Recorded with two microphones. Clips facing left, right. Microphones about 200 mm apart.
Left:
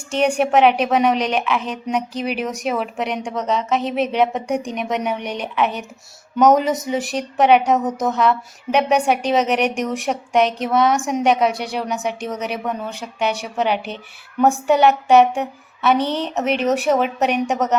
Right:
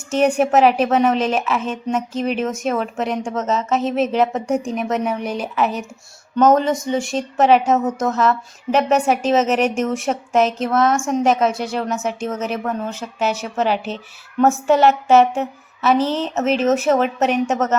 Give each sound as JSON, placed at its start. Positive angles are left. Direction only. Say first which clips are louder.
{"t": 0.3, "sound": "a woman's voice", "louder": "left 1 dB", "side_deg": 0}
{"t": 6.8, "sound": "a woman's voice", "louder": "right 1 dB", "side_deg": 5}
{"t": 7.8, "sound": "speech", "louder": "right 2 dB", "side_deg": 15}
{"t": 8.0, "sound": "a woman's voice", "louder": "even", "side_deg": 0}